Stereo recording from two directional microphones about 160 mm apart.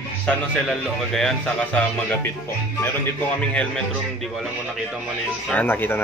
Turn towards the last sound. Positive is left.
turn(degrees=15)  # may be behind; listen again after turning